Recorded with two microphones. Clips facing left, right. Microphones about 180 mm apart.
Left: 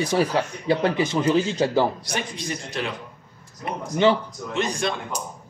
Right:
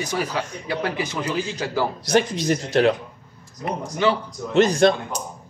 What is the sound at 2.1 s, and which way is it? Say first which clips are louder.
Speech: right 10 dB; 85° right.